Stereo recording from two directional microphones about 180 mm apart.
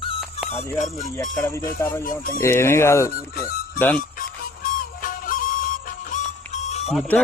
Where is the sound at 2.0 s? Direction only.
50° left (ahead or behind).